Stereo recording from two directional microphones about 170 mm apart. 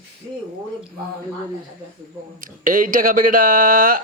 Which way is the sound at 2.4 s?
55° right (ahead or behind).